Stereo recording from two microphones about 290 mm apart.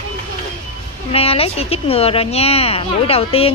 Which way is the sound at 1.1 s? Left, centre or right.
Centre.